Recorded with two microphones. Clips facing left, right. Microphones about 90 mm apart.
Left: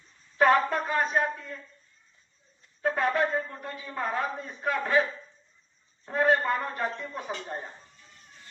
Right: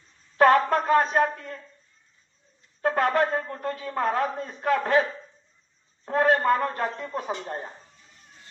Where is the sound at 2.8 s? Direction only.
60° right (ahead or behind).